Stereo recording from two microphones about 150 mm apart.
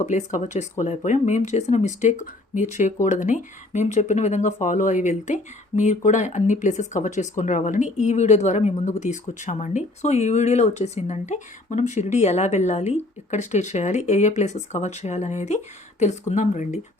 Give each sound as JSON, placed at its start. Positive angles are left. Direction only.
{"t": 0.0, "sound": "speech", "side_deg": 55}